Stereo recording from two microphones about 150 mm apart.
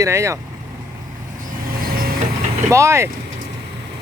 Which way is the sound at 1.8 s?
85° right.